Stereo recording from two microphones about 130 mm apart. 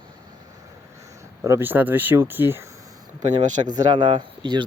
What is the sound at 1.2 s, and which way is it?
Speech, 20° right (ahead or behind).